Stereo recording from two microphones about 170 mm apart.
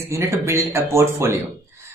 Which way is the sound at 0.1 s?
15° right (ahead or behind).